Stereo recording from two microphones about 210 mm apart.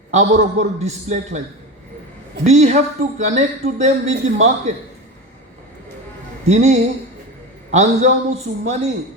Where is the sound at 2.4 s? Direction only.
35° right (ahead or behind).